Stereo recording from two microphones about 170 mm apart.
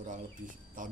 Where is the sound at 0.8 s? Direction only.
50° right (ahead or behind).